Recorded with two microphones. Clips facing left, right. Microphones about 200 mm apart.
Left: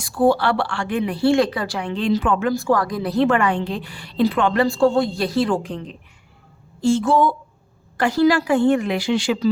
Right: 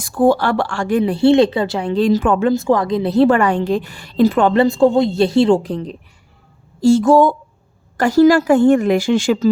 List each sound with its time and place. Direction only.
0.0 s a woman's voice: 50° right (ahead or behind)
2.5 s a woman's voice: 20° right (ahead or behind); by 4.5 s 45° right (ahead or behind)
4.5 s a woman's voice: 20° right (ahead or behind); by 9.5 s 50° right (ahead or behind)